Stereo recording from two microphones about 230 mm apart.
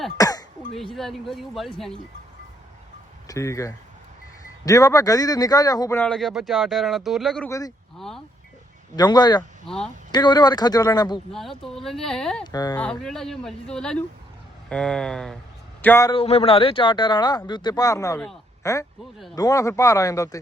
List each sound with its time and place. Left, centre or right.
0.2 s throat clearing: centre
0.7 s speech: centre
3.2 s a man's voice: centre
7.9 s vehicle: centre
9.0 s a man's voice: centre
9.6 s speech: centre
10.1 s a man's voice: centre
11.3 s speech: centre
12.5 s a man's voice: centre
16.1 s a man's voice: left